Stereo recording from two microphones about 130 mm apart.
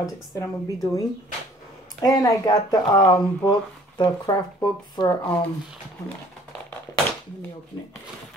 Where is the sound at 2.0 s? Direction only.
30° left (ahead or behind).